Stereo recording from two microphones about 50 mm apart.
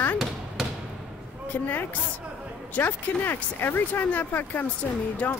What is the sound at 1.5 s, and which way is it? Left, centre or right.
A woman's voice, left.